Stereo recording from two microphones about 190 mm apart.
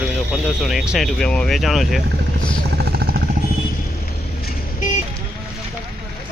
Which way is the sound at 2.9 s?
55° right (ahead or behind).